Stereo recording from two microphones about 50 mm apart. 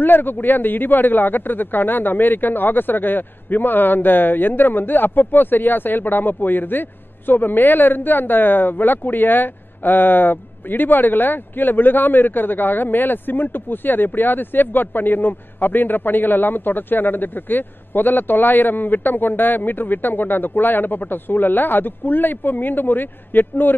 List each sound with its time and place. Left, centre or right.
0.0 s a man's voice: left